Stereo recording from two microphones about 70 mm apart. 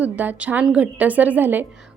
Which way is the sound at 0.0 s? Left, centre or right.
Right.